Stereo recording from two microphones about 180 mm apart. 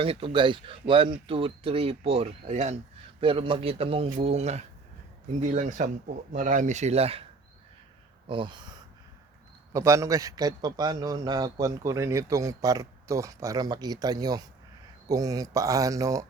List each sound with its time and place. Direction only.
0.0 s speech: 30° right (ahead or behind)
8.3 s a man's voice: 25° right (ahead or behind)